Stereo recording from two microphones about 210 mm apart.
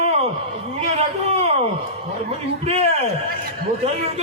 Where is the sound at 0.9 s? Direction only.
30° right (ahead or behind).